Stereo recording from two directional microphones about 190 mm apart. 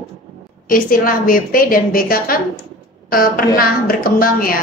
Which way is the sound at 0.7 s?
50° left (ahead or behind).